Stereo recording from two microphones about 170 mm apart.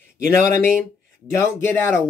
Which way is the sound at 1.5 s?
15° left (ahead or behind).